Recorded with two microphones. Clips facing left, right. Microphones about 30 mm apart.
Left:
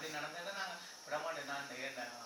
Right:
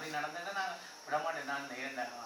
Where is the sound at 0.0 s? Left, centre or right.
Right.